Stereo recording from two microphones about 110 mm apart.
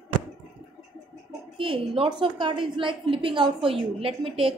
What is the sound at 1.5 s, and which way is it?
A woman's voice, 55° right (ahead or behind).